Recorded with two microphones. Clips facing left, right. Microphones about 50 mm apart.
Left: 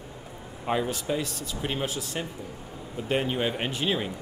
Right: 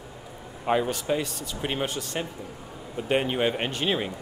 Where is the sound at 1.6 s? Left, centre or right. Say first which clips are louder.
Right 2 dB; centre.